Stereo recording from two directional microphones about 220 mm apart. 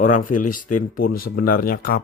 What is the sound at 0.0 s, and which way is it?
Speech, 35° left (ahead or behind).